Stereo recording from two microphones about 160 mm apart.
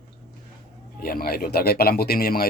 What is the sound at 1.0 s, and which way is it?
Speech, 70° left (ahead or behind).